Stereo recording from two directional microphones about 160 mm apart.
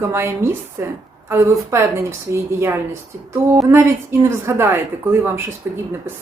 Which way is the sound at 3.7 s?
15° right (ahead or behind).